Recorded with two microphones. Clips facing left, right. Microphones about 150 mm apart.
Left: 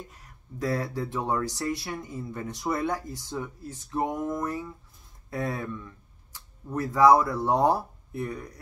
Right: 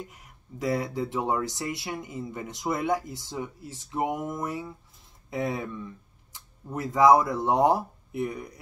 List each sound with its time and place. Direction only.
0.1 s speech: 15° right (ahead or behind)